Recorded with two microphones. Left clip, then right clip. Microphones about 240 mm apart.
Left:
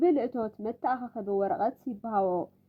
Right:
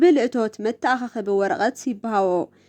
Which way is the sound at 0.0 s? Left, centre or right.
Right.